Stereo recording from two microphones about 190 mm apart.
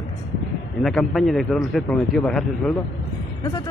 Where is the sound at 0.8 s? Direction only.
Centre (ahead or behind).